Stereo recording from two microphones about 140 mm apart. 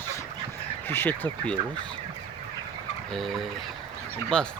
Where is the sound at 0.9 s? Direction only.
15° left (ahead or behind).